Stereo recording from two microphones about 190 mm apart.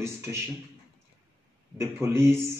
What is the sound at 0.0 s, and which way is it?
Speech, 15° right (ahead or behind).